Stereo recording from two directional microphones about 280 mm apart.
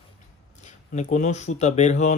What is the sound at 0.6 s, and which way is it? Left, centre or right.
Speech, left.